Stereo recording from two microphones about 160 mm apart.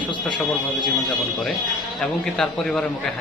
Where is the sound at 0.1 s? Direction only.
30° left (ahead or behind).